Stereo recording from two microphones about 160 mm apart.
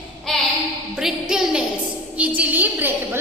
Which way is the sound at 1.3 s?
5° right (ahead or behind).